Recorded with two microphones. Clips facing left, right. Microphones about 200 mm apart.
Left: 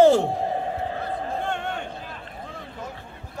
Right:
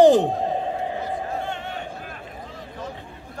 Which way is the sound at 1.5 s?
50° left (ahead or behind).